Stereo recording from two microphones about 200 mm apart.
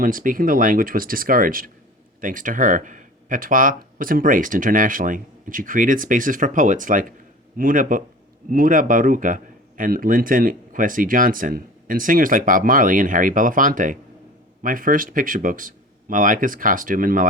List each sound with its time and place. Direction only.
0.0 s speech: 45° right (ahead or behind)